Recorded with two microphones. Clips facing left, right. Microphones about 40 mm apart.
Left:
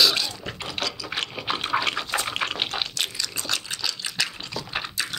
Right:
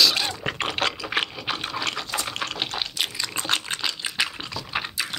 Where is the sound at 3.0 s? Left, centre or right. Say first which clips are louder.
Right 1 dB; right.